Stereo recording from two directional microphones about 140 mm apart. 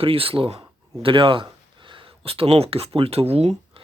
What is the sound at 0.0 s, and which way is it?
Speech, 40° right (ahead or behind).